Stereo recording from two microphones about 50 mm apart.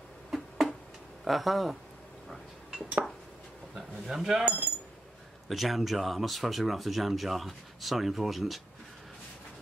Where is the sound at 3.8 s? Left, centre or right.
Centre.